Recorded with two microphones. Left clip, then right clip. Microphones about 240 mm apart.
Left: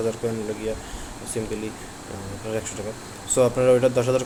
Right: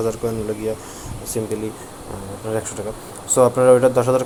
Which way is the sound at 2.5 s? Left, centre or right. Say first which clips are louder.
Right 5 dB; centre.